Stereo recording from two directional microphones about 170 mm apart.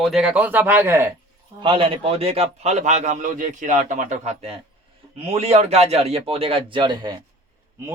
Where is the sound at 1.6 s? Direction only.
30° right (ahead or behind).